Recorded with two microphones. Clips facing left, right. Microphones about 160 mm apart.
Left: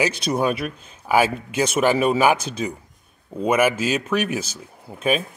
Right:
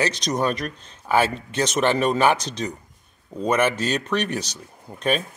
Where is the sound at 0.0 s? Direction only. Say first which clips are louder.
Left 2 dB; 10° left (ahead or behind).